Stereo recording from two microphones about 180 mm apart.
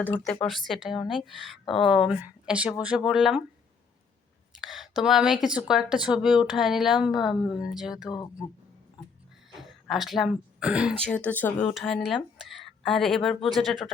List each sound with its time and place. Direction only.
0.3 s a woman's voice: centre (ahead or behind)
4.5 s a woman's voice: centre (ahead or behind)
8.1 s speech: 20° left (ahead or behind)
9.6 s speech: centre (ahead or behind)
11.0 s a woman's voice: 5° left (ahead or behind)